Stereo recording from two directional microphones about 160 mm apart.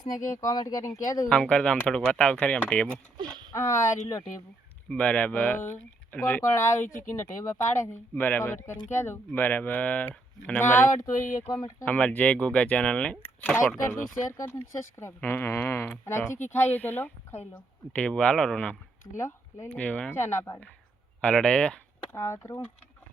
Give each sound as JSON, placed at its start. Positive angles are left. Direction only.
{"t": 0.3, "sound": "speech", "side_deg": 25}
{"t": 1.3, "sound": "speech", "side_deg": 5}
{"t": 3.5, "sound": "speech", "side_deg": 20}
{"t": 6.7, "sound": "speech", "side_deg": 55}
{"t": 7.4, "sound": "speech", "side_deg": 20}
{"t": 22.1, "sound": "speech", "side_deg": 15}